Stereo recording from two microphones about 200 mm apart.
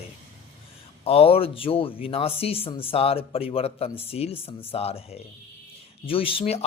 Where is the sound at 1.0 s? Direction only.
30° left (ahead or behind).